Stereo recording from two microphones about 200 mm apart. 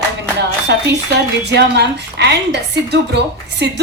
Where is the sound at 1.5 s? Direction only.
60° right (ahead or behind).